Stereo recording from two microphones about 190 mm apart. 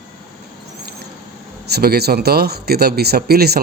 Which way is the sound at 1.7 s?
55° right (ahead or behind).